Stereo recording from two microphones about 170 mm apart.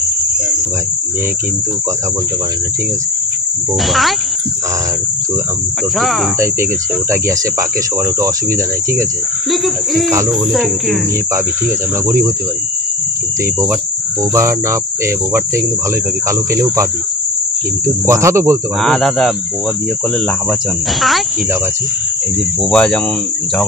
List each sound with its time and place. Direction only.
3.8 s speech: centre (ahead or behind)
5.9 s speech: centre (ahead or behind)
6.4 s speech: 15° right (ahead or behind)
9.5 s speech: centre (ahead or behind)
14.3 s speech: 15° right (ahead or behind)
17.8 s speech: 15° right (ahead or behind)
18.8 s speech: centre (ahead or behind)
22.6 s speech: 5° left (ahead or behind)